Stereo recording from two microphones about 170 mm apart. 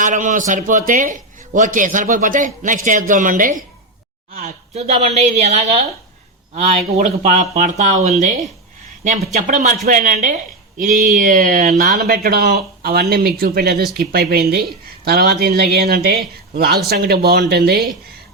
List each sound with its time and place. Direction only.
0.0 s a man's voice: 45° right (ahead or behind)
4.3 s a sound: 55° right (ahead or behind)
4.7 s a woman's voice: 40° right (ahead or behind)
9.3 s a man's voice: 50° right (ahead or behind); by 17.8 s 65° right (ahead or behind)